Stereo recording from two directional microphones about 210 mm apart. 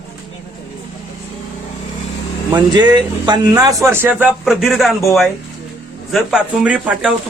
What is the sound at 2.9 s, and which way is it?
Speech, 20° right (ahead or behind).